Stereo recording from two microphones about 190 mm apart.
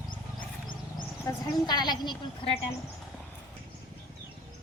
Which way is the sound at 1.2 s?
20° left (ahead or behind).